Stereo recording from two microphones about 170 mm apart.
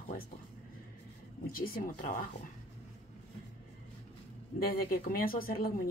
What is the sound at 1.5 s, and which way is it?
Speech, 60° left (ahead or behind).